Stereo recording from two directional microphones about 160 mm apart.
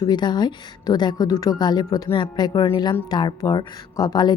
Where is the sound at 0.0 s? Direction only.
25° left (ahead or behind).